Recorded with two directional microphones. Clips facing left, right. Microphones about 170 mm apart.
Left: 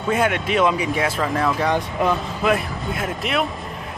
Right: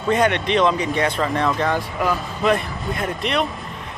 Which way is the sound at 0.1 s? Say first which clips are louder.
Right 2 dB; 5° left (ahead or behind).